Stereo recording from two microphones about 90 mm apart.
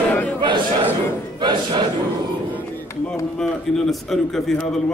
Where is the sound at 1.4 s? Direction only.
60° right (ahead or behind).